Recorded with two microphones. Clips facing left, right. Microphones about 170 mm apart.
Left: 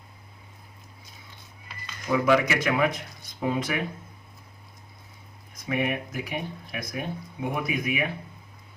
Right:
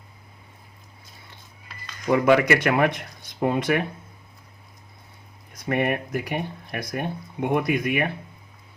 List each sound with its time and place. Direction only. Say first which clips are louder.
2.0 s speech: right 4 dB; 60° right (ahead or behind)
5.6 s speech: right 4 dB; 60° right (ahead or behind)